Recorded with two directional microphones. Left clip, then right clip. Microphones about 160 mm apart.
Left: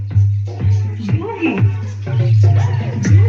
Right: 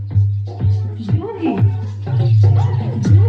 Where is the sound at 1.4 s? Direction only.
40° right (ahead or behind).